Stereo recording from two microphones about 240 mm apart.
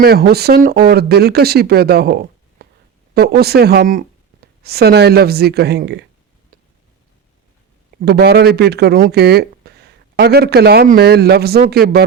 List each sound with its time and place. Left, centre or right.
0.0 s speech: right
8.0 s speech: right